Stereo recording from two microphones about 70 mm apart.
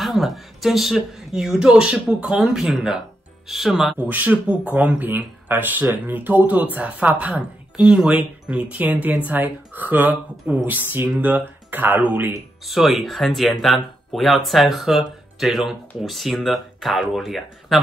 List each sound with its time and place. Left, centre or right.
0.0 s speech: centre
4.0 s speech: right
12.6 s speech: centre